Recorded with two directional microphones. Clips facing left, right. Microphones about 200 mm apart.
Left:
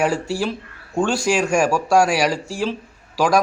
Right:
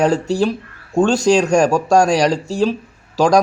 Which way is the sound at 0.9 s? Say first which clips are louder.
Right 6 dB; 25° right (ahead or behind).